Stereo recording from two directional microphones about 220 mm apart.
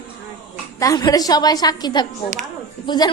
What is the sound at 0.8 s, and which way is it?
A woman's voice, 15° left (ahead or behind).